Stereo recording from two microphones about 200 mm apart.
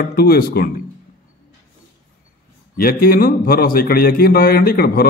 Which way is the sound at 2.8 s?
50° left (ahead or behind).